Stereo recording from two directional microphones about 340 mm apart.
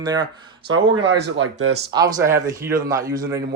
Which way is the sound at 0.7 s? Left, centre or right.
Right.